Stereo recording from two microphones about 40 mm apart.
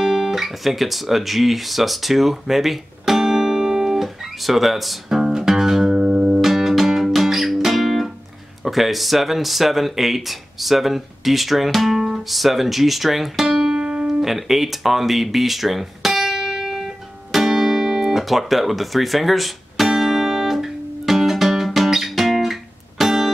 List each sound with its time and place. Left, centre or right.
0.0 s guitar: centre
6.4 s music: centre
8.6 s speech: centre
13.6 s music: centre
14.2 s music: centre